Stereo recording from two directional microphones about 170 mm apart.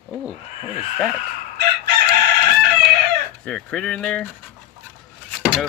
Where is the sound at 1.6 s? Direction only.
70° right (ahead or behind).